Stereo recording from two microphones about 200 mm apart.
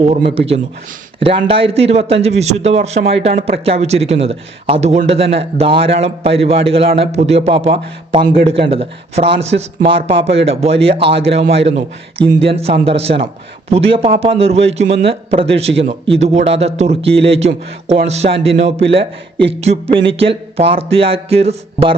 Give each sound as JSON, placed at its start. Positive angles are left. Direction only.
{"t": 0.0, "sound": "a man's voice", "side_deg": -35}